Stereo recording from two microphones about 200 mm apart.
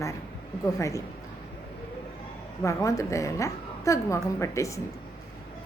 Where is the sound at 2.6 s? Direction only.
15° left (ahead or behind).